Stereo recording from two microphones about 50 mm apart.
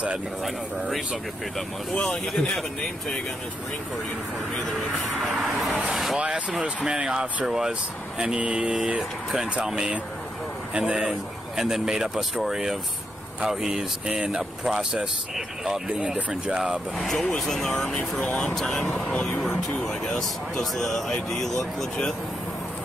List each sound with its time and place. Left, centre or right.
2.0 s speech: centre
4.6 s speech: centre
6.1 s speech: right
17.0 s speech: centre